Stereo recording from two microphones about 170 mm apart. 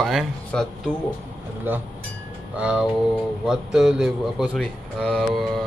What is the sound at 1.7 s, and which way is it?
Music, 10° right (ahead or behind).